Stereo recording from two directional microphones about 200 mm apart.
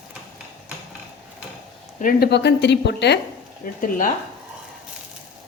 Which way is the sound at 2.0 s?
45° left (ahead or behind).